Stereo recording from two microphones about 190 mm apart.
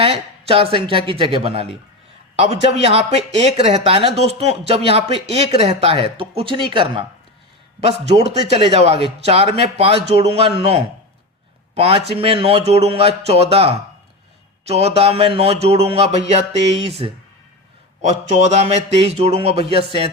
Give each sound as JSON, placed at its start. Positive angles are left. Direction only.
{"t": 0.0, "sound": "speech", "side_deg": -30}
{"t": 8.2, "sound": "speech", "side_deg": -35}